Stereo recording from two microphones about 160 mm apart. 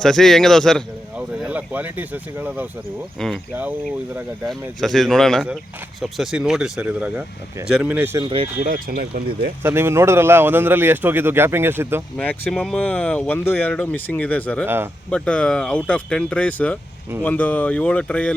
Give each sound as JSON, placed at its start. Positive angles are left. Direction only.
{"t": 0.0, "sound": "speech", "side_deg": 5}
{"t": 1.4, "sound": "a man's voice", "side_deg": -10}
{"t": 4.8, "sound": "a man's voice", "side_deg": 0}
{"t": 8.2, "sound": "speech", "side_deg": -30}
{"t": 8.6, "sound": "speech", "side_deg": -65}
{"t": 9.6, "sound": "a man's voice", "side_deg": -15}
{"t": 12.1, "sound": "speech", "side_deg": 10}